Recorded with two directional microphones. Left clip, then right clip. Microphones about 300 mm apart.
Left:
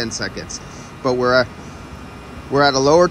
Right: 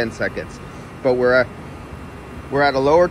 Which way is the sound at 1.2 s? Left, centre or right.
Centre.